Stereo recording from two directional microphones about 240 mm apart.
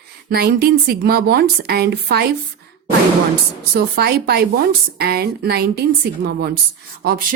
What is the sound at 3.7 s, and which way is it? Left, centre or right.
A woman's voice, right.